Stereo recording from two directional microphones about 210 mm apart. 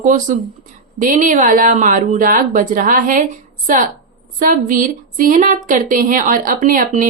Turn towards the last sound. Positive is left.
turn(degrees=-40)  # may be behind; listen again after turning